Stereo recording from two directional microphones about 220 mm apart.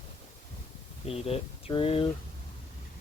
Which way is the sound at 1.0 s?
25° left (ahead or behind).